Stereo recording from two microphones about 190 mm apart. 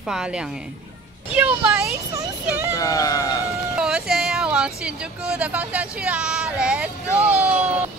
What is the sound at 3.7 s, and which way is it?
A child's voice, 5° right (ahead or behind).